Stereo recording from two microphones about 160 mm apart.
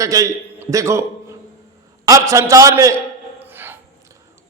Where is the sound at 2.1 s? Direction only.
20° right (ahead or behind).